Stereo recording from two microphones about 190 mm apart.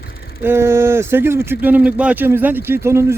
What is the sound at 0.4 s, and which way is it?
A man's voice, 15° right (ahead or behind).